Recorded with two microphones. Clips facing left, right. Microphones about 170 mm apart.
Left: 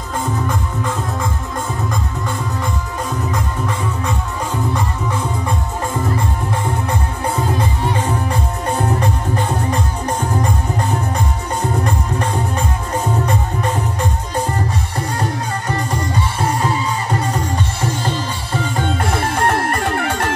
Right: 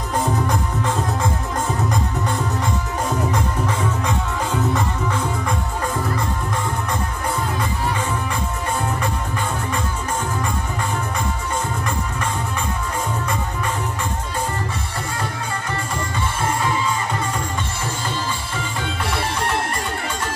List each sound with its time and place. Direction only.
7.5 s music: 35° left (ahead or behind)
11.8 s music: 35° left (ahead or behind)
18.6 s music: 45° left (ahead or behind); by 20.3 s 60° left (ahead or behind)